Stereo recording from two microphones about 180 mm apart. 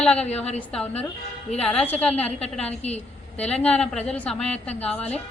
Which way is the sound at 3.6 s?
5° left (ahead or behind).